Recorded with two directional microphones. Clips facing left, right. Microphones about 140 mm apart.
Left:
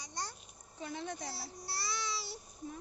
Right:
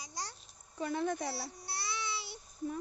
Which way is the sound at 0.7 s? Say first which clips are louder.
Right 7 dB; 55° right (ahead or behind).